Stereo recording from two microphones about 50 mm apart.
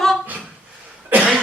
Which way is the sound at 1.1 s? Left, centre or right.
Right.